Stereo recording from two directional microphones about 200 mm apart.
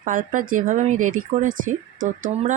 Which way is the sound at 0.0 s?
40° right (ahead or behind).